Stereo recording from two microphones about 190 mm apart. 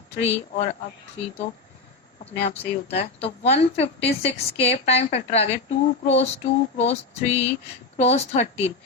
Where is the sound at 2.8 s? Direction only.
30° left (ahead or behind).